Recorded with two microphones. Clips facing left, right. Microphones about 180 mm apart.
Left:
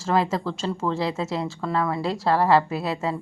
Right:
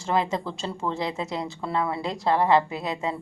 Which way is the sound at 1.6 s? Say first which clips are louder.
Left 2 dB; 30° right (ahead or behind).